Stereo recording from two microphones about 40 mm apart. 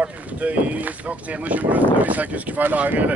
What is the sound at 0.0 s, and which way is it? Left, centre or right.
Speech, right.